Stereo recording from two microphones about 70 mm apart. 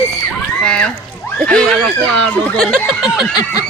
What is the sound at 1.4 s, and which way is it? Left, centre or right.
Speech, centre.